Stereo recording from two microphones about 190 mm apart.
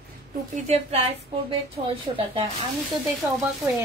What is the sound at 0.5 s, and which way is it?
Speech, 35° right (ahead or behind).